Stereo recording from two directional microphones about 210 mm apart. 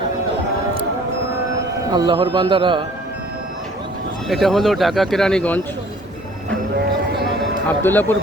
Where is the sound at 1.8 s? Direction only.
20° right (ahead or behind).